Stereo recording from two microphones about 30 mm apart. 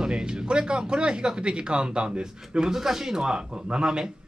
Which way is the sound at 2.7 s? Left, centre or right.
Centre.